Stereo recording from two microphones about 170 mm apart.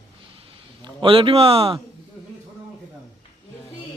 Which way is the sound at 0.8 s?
30° right (ahead or behind).